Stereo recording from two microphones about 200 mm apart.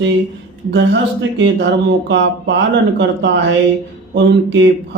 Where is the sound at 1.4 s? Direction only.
60° right (ahead or behind).